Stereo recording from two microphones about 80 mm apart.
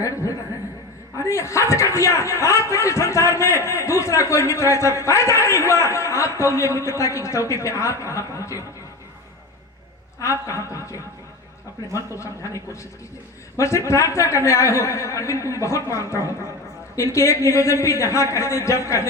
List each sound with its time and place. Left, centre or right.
0.0 s a sound: left
1.1 s a man's voice: left
10.2 s a man's voice: left